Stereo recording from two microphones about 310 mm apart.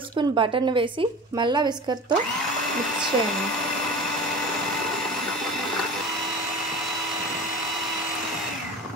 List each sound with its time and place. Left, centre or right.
0.3 s a woman's voice: centre